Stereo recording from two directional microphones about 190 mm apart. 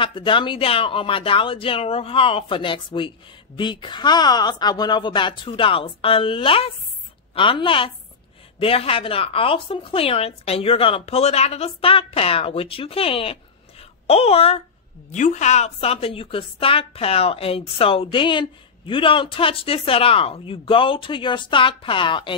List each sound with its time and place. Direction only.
0.0 s a woman's voice: 25° left (ahead or behind)